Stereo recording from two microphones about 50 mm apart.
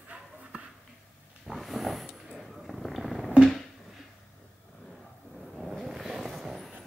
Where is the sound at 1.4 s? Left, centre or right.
Centre.